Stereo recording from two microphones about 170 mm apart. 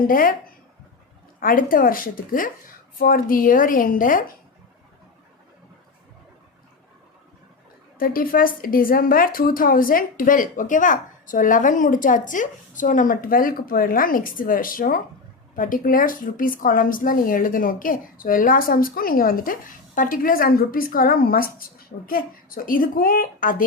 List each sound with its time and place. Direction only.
0.0 s a woman's voice: 55° left (ahead or behind)
1.4 s a woman's voice: 55° left (ahead or behind)
7.9 s a woman's voice: 55° left (ahead or behind)